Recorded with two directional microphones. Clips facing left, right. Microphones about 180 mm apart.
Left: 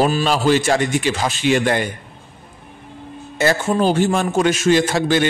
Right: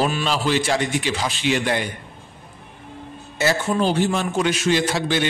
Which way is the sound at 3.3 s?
50° left (ahead or behind).